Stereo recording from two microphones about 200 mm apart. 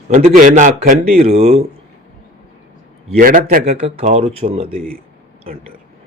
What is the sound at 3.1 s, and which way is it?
Speech, 45° right (ahead or behind).